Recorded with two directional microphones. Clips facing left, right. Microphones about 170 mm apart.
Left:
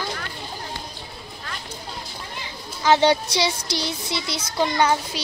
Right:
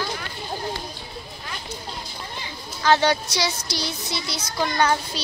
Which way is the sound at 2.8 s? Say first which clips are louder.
Left 2 dB; 20° left (ahead or behind).